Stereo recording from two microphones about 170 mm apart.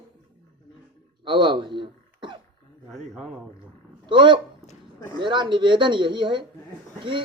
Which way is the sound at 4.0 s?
30° right (ahead or behind).